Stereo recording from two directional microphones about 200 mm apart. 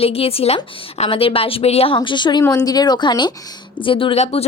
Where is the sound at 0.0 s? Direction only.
30° left (ahead or behind).